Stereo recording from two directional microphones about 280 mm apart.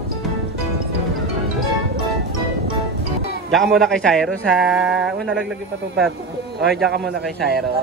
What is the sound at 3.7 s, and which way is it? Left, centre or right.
Speech, centre.